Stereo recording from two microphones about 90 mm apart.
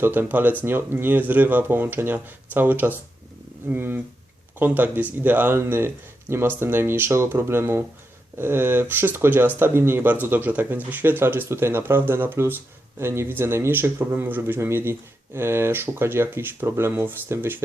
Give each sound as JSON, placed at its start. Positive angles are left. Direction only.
{"t": 0.0, "sound": "speech", "side_deg": -25}